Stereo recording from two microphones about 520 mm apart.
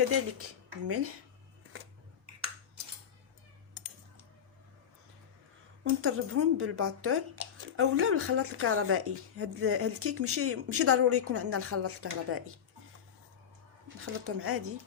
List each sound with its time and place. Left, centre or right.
0.1 s speech: right
6.0 s speech: right
14.0 s speech: right